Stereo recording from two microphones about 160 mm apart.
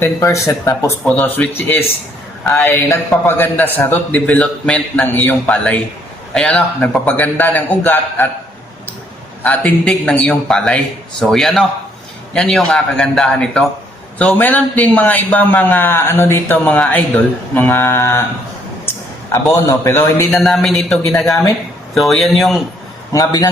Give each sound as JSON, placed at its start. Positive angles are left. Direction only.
{"t": 0.0, "sound": "a man's voice", "side_deg": 20}
{"t": 9.4, "sound": "a man's voice", "side_deg": 10}
{"t": 19.3, "sound": "a man's voice", "side_deg": 15}
{"t": 20.4, "sound": "a man's voice", "side_deg": 0}
{"t": 23.1, "sound": "speech", "side_deg": 20}